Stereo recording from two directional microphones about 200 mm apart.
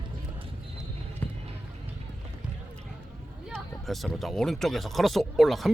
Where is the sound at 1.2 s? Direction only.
5° left (ahead or behind).